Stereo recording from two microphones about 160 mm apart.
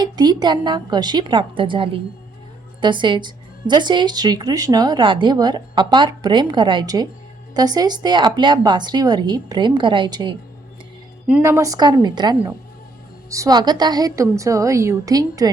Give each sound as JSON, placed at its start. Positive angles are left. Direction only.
{"t": 0.0, "sound": "speech", "side_deg": -25}
{"t": 11.4, "sound": "speech", "side_deg": -20}